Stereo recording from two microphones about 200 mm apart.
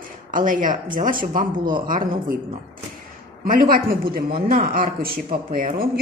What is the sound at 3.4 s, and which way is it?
Speech, 45° right (ahead or behind).